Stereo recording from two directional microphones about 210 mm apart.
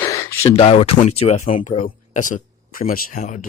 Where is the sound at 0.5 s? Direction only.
30° left (ahead or behind).